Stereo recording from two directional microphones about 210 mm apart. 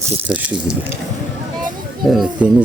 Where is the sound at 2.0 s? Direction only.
Centre (ahead or behind).